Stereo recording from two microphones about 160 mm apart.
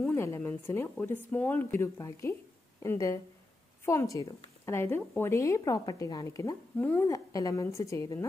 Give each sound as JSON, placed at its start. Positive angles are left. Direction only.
{"t": 0.1, "sound": "a woman's voice", "side_deg": 15}